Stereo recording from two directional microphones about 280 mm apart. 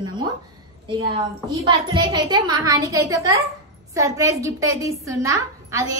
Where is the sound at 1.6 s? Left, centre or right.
Centre.